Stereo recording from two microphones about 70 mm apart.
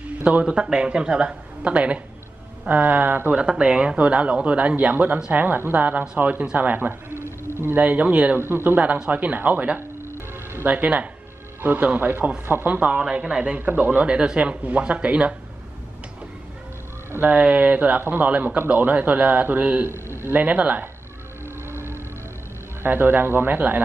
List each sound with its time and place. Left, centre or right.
0.2 s speech: centre; by 7.8 s right
7.8 s speech: right
8.4 s speech: right
10.1 s music: right
10.7 s speech: right
17.1 s speech: right
22.8 s speech: right